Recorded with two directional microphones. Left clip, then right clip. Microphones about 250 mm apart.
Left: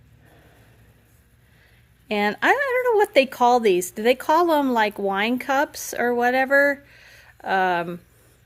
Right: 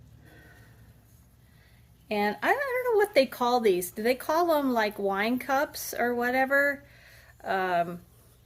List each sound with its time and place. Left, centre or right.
2.0 s speech: left